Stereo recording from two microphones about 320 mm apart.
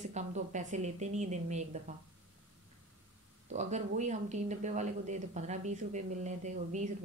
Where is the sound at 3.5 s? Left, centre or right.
Right.